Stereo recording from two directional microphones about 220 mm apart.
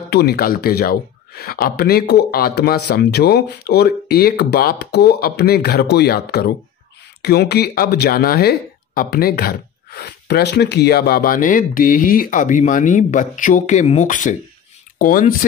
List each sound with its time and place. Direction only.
0.1 s speech: 45° left (ahead or behind)